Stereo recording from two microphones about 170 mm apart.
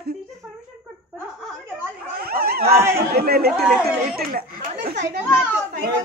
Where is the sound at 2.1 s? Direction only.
65° right (ahead or behind).